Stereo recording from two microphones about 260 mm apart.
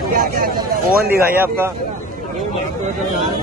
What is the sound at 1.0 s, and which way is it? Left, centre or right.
Speech, centre.